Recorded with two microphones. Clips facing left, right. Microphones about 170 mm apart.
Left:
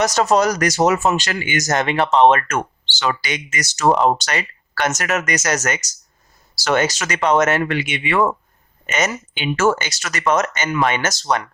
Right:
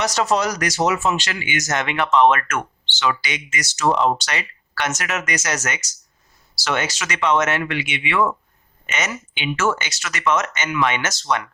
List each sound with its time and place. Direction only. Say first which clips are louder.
0.0 s speech: left 4 dB; 45° left (ahead or behind)